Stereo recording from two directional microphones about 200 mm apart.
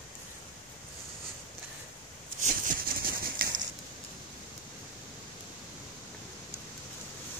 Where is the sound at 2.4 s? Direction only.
45° right (ahead or behind).